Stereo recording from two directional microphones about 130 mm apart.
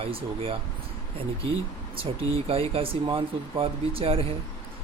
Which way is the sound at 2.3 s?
45° right (ahead or behind).